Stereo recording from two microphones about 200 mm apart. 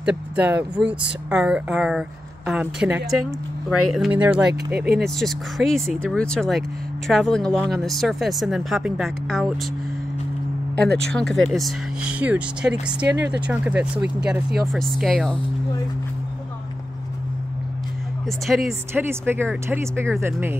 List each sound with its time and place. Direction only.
0.0 s speech: 5° right (ahead or behind)
10.8 s speech: 55° right (ahead or behind)
11.1 s speech: 5° left (ahead or behind)
18.2 s speech: centre (ahead or behind)
19.0 s speech: 10° right (ahead or behind)